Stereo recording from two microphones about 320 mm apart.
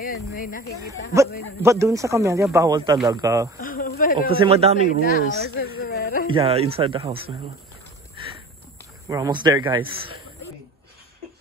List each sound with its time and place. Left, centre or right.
0.0 s speech: left
1.6 s a man's voice: centre
3.5 s speech: left
4.3 s speech: centre
5.1 s speech: left
6.3 s a man's voice: centre
9.1 s a man's voice: centre